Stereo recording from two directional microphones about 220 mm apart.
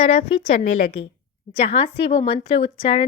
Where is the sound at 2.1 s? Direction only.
25° left (ahead or behind).